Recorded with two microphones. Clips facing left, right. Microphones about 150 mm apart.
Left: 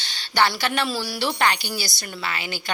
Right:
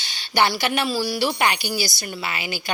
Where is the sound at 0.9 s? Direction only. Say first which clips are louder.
Right 4 dB; centre (ahead or behind).